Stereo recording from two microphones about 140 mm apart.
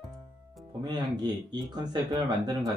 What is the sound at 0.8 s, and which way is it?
Speech, 30° right (ahead or behind).